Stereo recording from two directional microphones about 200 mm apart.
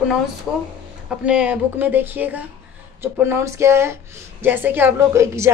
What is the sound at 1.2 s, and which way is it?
A woman's voice, 5° right (ahead or behind).